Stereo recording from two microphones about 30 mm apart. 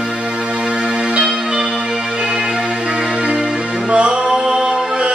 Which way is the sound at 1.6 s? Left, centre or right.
Right.